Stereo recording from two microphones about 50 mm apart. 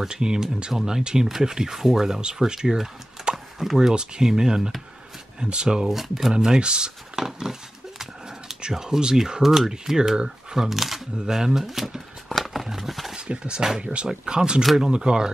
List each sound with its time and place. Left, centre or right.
0.0 s speech: centre
5.9 s speech: centre
6.3 s speech: centre
12.4 s a sound: centre
13.1 s speech: centre
14.6 s speech: centre
14.9 s speech: centre